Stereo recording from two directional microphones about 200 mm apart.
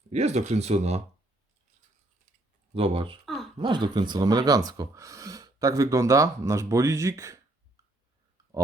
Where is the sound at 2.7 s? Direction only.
25° right (ahead or behind).